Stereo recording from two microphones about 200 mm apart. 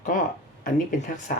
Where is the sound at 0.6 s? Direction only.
40° left (ahead or behind).